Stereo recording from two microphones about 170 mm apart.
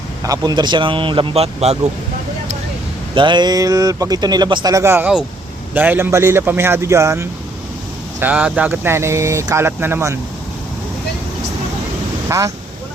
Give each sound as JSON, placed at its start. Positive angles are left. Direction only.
{"t": 0.2, "sound": "speech", "side_deg": -20}
{"t": 3.2, "sound": "speech", "side_deg": -25}